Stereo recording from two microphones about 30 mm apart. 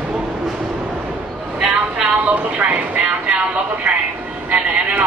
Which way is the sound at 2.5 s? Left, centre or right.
Right.